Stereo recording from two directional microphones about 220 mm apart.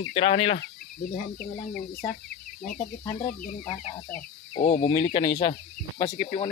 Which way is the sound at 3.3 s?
40° left (ahead or behind).